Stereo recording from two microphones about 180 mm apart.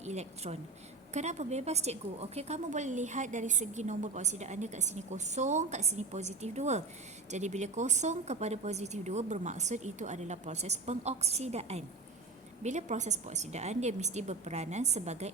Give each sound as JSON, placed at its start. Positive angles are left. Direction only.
{"t": 0.0, "sound": "a woman's voice", "side_deg": -40}